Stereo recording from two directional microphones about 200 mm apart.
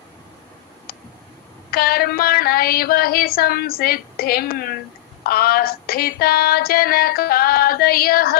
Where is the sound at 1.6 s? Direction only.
50° left (ahead or behind).